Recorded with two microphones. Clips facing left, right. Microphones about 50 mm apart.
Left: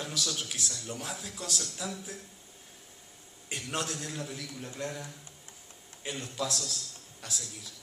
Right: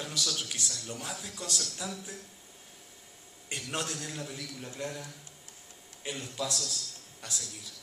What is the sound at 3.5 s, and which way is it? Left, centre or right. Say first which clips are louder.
Speech: left 1 dB; centre.